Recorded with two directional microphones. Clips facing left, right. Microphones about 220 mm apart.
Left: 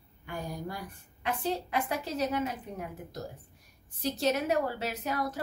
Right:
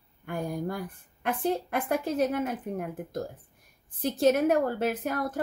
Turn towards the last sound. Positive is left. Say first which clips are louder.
# right 4 dB
turn(degrees=-50)  # may be behind; listen again after turning